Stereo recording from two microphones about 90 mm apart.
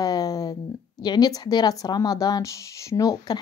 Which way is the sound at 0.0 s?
45° left (ahead or behind).